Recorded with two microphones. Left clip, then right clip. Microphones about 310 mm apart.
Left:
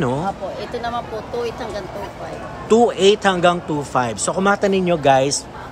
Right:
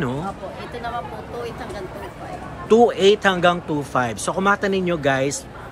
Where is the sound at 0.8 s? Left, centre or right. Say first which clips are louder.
Left 1 dB; left.